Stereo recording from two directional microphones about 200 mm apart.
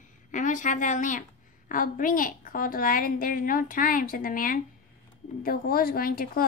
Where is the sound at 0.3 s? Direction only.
40° left (ahead or behind).